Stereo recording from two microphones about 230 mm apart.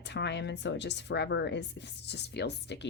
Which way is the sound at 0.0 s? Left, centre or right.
Left.